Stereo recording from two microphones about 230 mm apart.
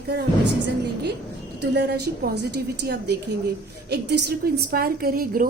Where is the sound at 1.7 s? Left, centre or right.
Right.